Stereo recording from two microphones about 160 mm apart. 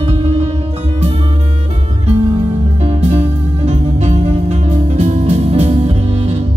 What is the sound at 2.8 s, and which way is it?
Music, 40° right (ahead or behind).